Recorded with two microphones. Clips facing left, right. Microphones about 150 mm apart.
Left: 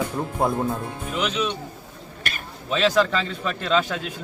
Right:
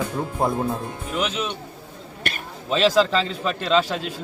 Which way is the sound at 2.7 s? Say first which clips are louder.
Right 2 dB; 30° right (ahead or behind).